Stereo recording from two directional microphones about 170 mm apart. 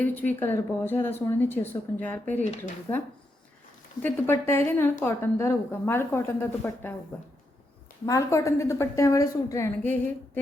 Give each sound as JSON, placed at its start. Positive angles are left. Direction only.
{"t": 0.0, "sound": "a woman's voice", "side_deg": 10}
{"t": 4.0, "sound": "a woman's voice", "side_deg": 15}
{"t": 8.0, "sound": "a woman's voice", "side_deg": 20}